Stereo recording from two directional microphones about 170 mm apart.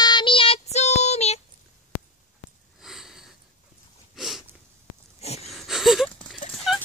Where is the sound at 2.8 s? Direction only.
Centre (ahead or behind).